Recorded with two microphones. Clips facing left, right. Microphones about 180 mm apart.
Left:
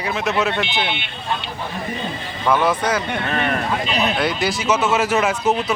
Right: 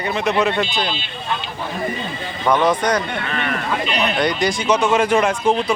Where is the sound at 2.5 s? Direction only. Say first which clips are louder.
Right 2 dB; 5° left (ahead or behind).